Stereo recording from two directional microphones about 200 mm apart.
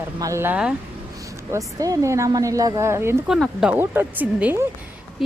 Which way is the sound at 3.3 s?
5° right (ahead or behind).